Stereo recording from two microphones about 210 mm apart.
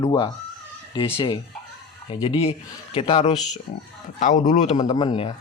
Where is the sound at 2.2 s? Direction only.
25° left (ahead or behind).